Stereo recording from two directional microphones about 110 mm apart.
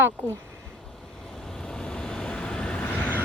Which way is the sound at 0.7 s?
5° left (ahead or behind).